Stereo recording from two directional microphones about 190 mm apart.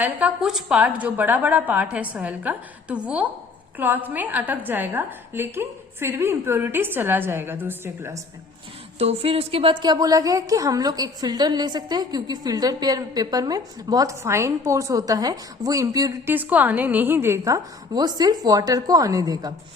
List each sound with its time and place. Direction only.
0.0 s a woman's voice: 5° right (ahead or behind)
9.0 s a woman's voice: 30° right (ahead or behind)